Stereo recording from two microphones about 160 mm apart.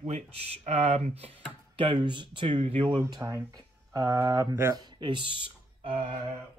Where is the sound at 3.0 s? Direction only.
20° right (ahead or behind).